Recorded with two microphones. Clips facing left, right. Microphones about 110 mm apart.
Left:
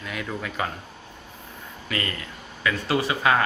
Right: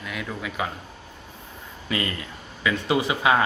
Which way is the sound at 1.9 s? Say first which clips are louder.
Right 2 dB; 20° right (ahead or behind).